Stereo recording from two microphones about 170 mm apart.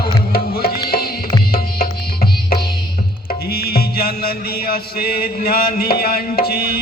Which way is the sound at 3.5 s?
65° left (ahead or behind).